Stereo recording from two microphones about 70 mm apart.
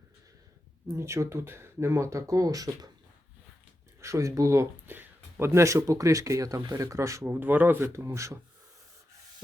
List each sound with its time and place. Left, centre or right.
0.9 s speech: right
4.0 s speech: right
4.9 s speech: right
7.3 s speech: right
7.9 s speech: right